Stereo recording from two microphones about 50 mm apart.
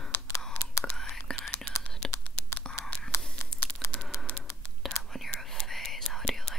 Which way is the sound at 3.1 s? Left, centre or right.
Left.